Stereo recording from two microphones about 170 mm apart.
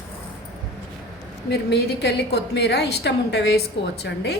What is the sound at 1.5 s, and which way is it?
A woman's voice, 75° left (ahead or behind).